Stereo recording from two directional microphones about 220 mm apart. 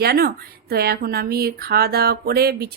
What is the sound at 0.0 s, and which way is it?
Speech, 45° right (ahead or behind).